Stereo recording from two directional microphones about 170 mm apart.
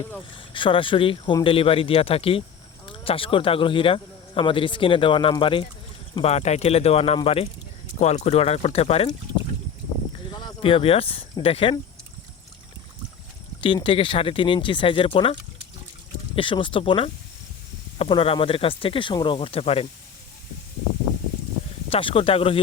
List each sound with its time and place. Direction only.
0.3 s speech: 30° left (ahead or behind)
10.3 s speech: 30° left (ahead or behind)
13.6 s speech: 30° left (ahead or behind)
21.8 s speech: 35° left (ahead or behind)